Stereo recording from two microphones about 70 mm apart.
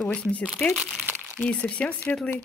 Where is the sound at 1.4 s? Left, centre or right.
Centre.